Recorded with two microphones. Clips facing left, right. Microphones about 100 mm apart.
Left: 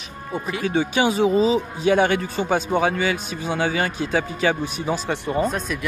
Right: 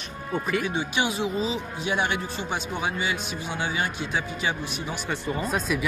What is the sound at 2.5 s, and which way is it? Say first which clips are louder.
Speech: left 10 dB; 50° left (ahead or behind).